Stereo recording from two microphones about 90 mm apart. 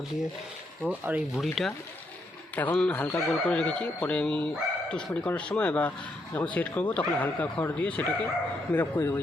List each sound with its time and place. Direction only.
0.9 s speech: 20° right (ahead or behind)
1.4 s speech: centre (ahead or behind)
2.6 s a man's voice: 20° left (ahead or behind)